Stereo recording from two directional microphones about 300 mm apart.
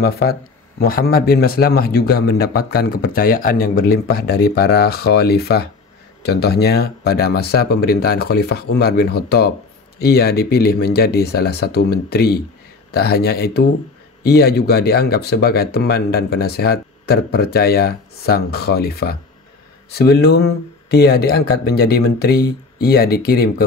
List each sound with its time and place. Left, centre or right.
0.0 s a man's voice: left